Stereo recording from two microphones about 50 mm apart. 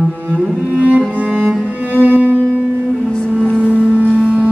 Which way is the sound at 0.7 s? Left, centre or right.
Right.